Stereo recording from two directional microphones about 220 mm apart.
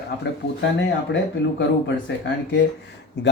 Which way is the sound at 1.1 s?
55° left (ahead or behind).